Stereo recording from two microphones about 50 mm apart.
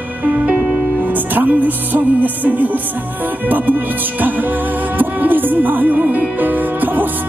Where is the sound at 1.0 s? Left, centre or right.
Right.